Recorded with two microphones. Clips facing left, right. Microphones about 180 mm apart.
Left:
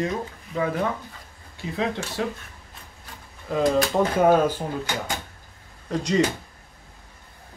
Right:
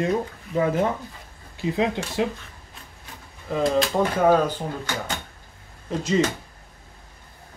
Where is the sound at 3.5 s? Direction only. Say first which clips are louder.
Left 1 dB; 5° left (ahead or behind).